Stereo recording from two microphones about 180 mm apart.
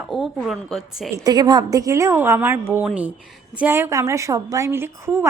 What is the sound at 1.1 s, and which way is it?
A woman's voice, 20° right (ahead or behind).